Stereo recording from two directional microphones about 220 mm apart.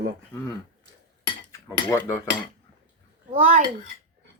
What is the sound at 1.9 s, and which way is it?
Cutlery, 15° left (ahead or behind).